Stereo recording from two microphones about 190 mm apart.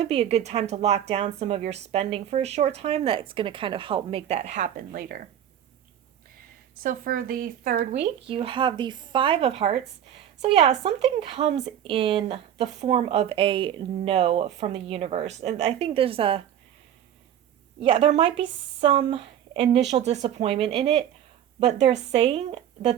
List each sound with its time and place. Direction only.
0.0 s speech: 35° right (ahead or behind)
6.8 s speech: 45° right (ahead or behind)
7.9 s speech: 30° right (ahead or behind)
17.7 s speech: 25° right (ahead or behind)